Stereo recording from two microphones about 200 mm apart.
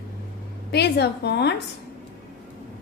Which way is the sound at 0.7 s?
55° left (ahead or behind).